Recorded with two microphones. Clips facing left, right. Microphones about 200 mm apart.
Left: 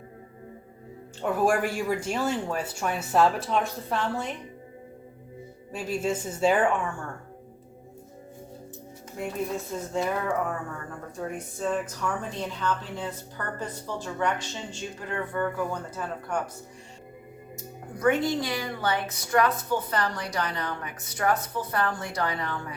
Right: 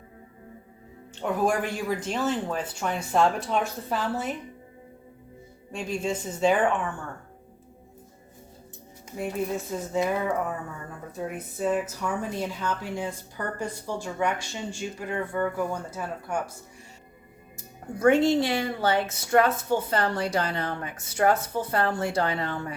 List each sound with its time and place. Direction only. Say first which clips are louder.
1.2 s speech: left 1 dB; 5° left (ahead or behind)
5.7 s speech: left 1 dB; 5° left (ahead or behind)
9.9 s speech: right 2 dB; 5° right (ahead or behind)
17.9 s a woman's voice: right 4 dB; 25° right (ahead or behind)